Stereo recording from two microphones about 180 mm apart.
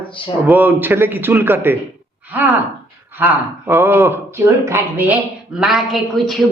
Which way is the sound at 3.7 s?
10° right (ahead or behind).